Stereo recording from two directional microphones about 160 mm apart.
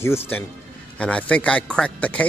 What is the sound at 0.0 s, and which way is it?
Speech, 15° left (ahead or behind).